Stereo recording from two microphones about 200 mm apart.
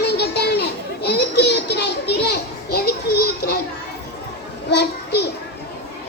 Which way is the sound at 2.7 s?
50° left (ahead or behind).